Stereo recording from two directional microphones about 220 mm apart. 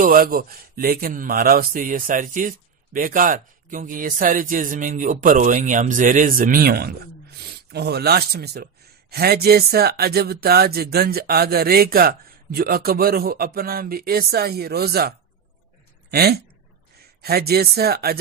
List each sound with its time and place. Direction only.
0.0 s speech: 40° right (ahead or behind)